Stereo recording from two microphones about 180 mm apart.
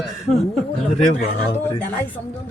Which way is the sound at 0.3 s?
Centre (ahead or behind).